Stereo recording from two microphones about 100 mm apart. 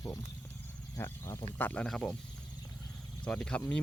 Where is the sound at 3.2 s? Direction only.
10° left (ahead or behind).